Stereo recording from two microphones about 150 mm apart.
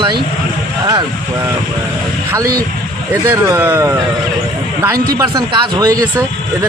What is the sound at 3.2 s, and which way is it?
Speech, 15° right (ahead or behind).